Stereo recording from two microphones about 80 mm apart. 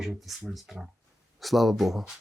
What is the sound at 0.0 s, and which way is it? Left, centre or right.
Speech, centre.